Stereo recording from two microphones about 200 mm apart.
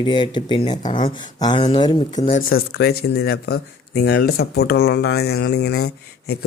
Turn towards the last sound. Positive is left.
turn(degrees=55)  # may be behind; listen again after turning